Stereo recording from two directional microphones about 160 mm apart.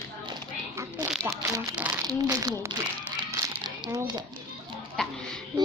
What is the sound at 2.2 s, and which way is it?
Speech, 20° right (ahead or behind).